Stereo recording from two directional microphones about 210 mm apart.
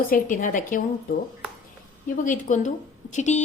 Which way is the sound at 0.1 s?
40° left (ahead or behind).